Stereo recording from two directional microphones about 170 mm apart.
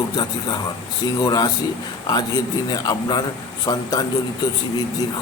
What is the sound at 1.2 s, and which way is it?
A man's voice, 25° left (ahead or behind).